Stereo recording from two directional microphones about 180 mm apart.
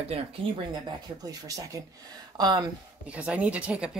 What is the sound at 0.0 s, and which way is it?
Speech, 35° right (ahead or behind).